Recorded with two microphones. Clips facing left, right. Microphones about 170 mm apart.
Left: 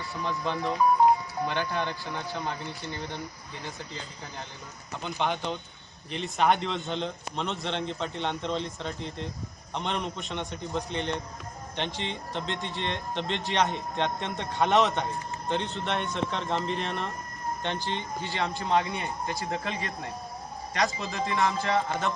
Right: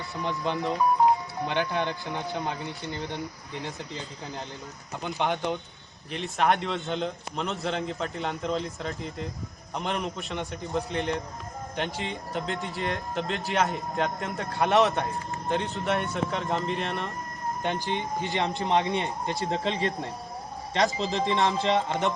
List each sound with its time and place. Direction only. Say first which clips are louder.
0.2 s a man's voice: right 2 dB; 20° right (ahead or behind)
5.0 s a man's voice: right 2 dB; 15° right (ahead or behind)
6.1 s a man's voice: even; centre (ahead or behind)
17.6 s speech: right 4 dB; 10° right (ahead or behind)